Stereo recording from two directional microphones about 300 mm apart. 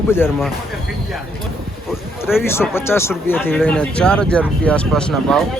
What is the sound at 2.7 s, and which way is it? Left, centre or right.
Speech, centre.